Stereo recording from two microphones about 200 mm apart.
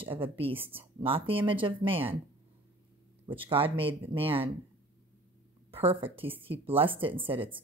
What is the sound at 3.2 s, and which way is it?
A woman's voice, 25° right (ahead or behind).